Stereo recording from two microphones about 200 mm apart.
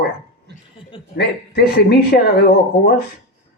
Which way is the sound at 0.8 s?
25° left (ahead or behind).